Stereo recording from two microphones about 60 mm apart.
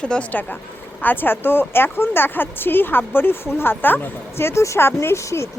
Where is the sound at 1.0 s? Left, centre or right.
Left.